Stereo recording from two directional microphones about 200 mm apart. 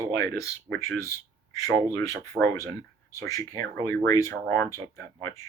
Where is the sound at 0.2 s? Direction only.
15° left (ahead or behind).